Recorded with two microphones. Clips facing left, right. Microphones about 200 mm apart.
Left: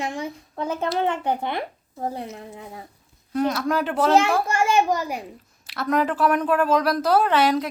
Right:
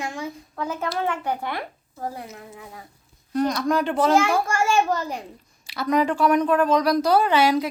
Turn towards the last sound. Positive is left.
turn(degrees=0)  # may be behind; listen again after turning